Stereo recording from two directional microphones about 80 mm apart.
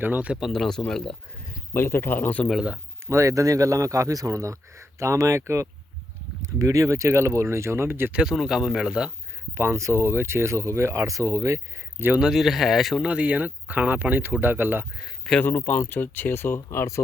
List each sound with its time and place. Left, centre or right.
0.0 s speech: centre
0.3 s speech: centre
1.7 s speech: left
2.5 s speech: centre
3.1 s a man's voice: right
8.1 s speech: centre
9.6 s speech: right
11.9 s speech: right
12.2 s speech: centre
13.1 s speech: centre
15.2 s speech: centre
15.4 s speech: left